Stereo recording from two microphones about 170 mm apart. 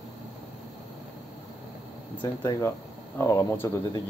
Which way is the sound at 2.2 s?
20° left (ahead or behind).